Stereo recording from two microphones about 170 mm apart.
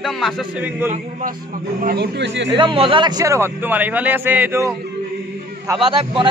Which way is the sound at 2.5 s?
30° right (ahead or behind).